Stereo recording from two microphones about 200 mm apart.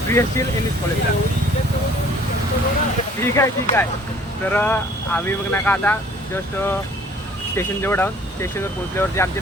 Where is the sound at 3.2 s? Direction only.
10° left (ahead or behind).